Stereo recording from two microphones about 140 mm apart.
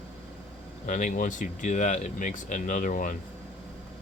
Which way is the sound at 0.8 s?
65° left (ahead or behind).